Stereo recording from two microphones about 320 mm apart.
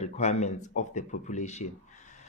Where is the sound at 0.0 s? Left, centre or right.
Left.